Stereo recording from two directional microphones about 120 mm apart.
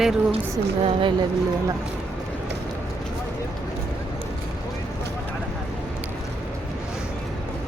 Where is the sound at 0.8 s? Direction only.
45° right (ahead or behind).